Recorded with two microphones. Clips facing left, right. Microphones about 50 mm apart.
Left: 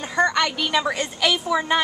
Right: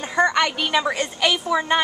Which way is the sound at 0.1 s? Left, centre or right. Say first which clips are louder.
Right 1 dB; centre.